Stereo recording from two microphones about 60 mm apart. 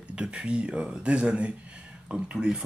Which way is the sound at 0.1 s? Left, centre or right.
Centre.